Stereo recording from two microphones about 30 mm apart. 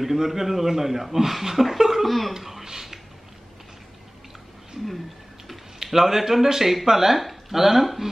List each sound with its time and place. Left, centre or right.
0.0 s speech: centre
2.0 s speech: centre
2.6 s a sound: centre
5.5 s speech: centre